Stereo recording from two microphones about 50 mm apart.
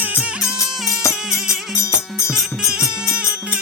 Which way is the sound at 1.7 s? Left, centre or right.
Left.